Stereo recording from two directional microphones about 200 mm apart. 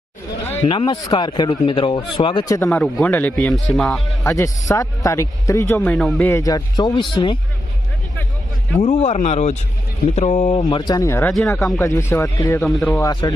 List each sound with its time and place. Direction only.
0.6 s speech: 25° left (ahead or behind); by 4.3 s centre (ahead or behind)
4.3 s speech: 15° left (ahead or behind)
6.3 s speech: 15° left (ahead or behind)
8.8 s speech: 35° left (ahead or behind); by 11.8 s centre (ahead or behind)
11.8 s speech: 15° left (ahead or behind)
12.6 s speech: 5° left (ahead or behind)